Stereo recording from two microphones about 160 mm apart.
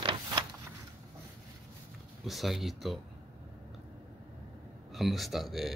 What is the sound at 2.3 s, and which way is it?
Speech, centre (ahead or behind).